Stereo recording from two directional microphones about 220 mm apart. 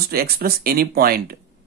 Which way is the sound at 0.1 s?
45° right (ahead or behind).